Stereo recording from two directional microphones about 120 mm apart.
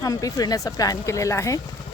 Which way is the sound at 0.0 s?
30° left (ahead or behind).